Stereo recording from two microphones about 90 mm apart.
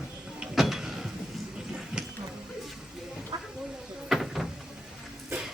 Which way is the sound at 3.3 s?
50° right (ahead or behind).